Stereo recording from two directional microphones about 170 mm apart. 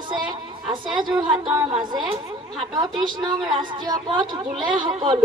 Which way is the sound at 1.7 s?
30° right (ahead or behind).